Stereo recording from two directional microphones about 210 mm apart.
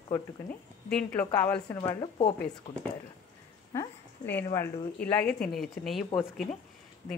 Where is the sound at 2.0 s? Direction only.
25° left (ahead or behind).